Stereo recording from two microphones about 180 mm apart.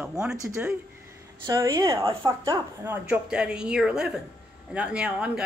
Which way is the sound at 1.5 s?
15° right (ahead or behind).